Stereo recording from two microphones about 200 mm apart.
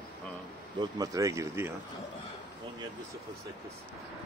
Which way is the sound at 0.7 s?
20° right (ahead or behind).